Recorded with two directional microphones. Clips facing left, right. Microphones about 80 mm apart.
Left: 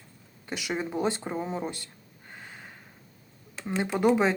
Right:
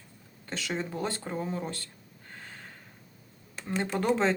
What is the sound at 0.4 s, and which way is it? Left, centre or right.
Speech, centre.